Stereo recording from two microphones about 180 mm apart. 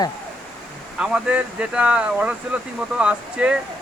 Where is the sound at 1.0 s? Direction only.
5° right (ahead or behind).